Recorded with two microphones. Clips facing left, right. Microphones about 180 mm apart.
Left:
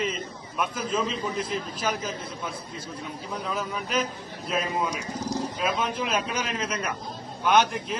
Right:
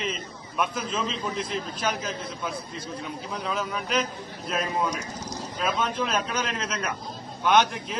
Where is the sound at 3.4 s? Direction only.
5° left (ahead or behind).